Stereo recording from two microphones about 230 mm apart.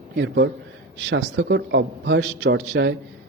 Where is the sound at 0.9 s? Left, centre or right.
Right.